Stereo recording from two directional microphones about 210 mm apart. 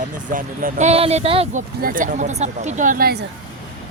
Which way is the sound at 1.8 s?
40° right (ahead or behind).